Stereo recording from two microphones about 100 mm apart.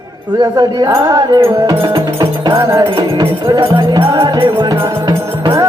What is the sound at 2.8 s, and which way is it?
Music, 55° right (ahead or behind).